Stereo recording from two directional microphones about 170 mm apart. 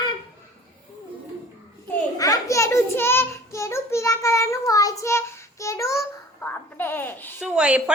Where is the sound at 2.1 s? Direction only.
20° left (ahead or behind).